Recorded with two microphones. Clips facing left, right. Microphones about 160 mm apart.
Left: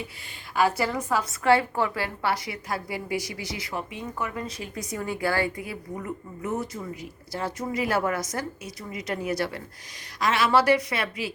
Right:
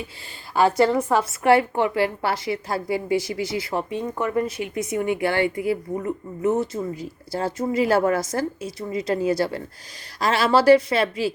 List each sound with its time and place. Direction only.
0.5 s a woman's voice: 30° right (ahead or behind)
4.7 s a woman's voice: 25° right (ahead or behind)